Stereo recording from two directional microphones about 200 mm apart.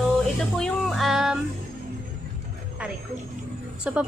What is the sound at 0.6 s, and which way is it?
Music, centre (ahead or behind).